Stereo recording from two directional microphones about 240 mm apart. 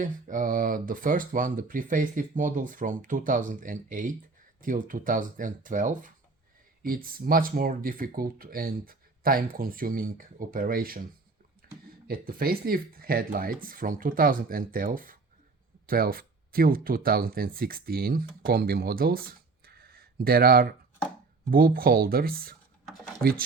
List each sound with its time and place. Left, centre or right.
0.0 s speech: right
12.0 s speech: right